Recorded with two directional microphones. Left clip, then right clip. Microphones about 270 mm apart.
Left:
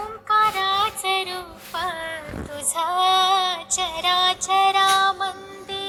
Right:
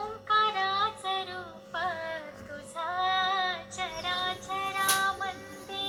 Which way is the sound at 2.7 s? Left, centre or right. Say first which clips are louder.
Left 10 dB; left.